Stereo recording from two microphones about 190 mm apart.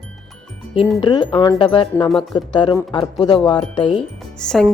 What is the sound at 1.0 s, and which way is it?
Speech, 25° left (ahead or behind).